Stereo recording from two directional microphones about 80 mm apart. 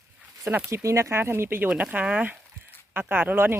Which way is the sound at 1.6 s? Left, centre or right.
Centre.